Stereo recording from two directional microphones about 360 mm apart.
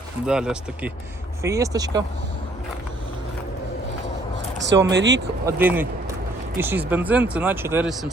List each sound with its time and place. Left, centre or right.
0.3 s speech: centre
4.6 s speech: right
5.5 s speech: centre